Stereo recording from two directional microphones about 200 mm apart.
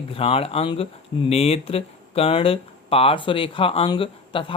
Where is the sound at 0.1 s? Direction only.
30° left (ahead or behind).